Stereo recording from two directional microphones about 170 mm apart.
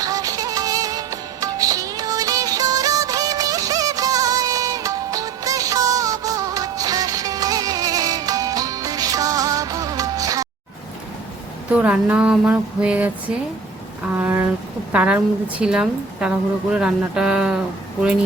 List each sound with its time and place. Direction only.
0.0 s music: 20° right (ahead or behind)
11.7 s a sound: 10° right (ahead or behind)
14.9 s a woman's voice: 10° right (ahead or behind)